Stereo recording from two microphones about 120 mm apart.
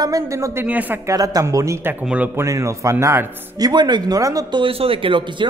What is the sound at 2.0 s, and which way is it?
Speech, 10° right (ahead or behind).